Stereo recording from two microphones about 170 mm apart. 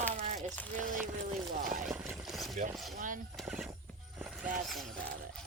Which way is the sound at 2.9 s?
50° right (ahead or behind).